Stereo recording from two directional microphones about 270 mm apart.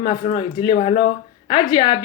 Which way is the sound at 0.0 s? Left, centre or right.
Centre.